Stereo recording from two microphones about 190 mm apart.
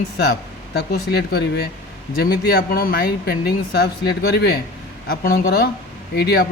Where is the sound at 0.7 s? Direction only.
60° left (ahead or behind).